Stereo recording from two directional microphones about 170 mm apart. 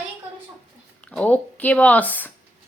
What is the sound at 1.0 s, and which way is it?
Speech, 10° left (ahead or behind).